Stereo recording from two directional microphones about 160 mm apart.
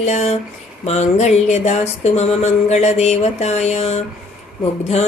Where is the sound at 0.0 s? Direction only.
45° left (ahead or behind).